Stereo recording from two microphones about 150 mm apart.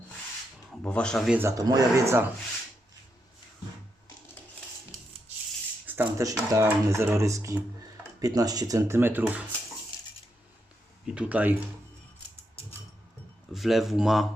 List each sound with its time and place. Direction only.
0.8 s speech: 5° left (ahead or behind)
1.3 s speech: 15° right (ahead or behind)
5.8 s speech: 15° right (ahead or behind)
11.0 s speech: 5° right (ahead or behind)
13.5 s speech: centre (ahead or behind)